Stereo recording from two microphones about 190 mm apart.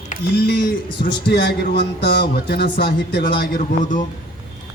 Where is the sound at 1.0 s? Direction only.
65° left (ahead or behind); by 4.0 s 40° left (ahead or behind).